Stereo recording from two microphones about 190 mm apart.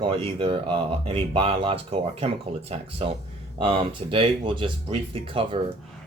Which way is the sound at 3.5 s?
25° right (ahead or behind).